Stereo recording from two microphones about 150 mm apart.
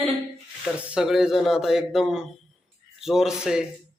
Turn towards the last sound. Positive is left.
turn(degrees=-5)  # may be behind; listen again after turning